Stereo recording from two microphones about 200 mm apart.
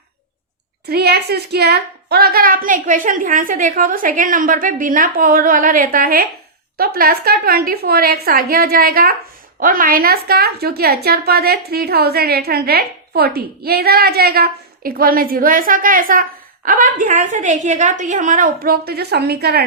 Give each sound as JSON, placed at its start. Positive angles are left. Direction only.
{"t": 0.9, "sound": "a woman's voice", "side_deg": -55}